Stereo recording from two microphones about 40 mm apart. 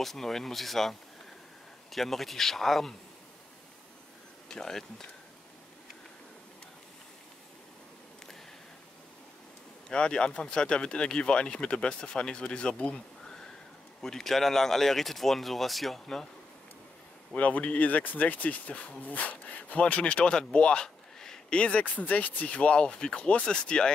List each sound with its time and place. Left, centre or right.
0.0 s speech: centre
4.5 s speech: centre
9.8 s speech: left
14.0 s speech: centre
17.3 s speech: left; by 21.4 s centre
21.5 s speech: left